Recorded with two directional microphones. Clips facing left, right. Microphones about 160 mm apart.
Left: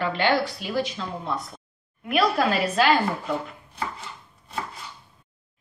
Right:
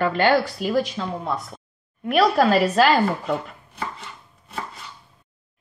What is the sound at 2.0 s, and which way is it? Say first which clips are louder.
Speech: right 4 dB; 35° right (ahead or behind).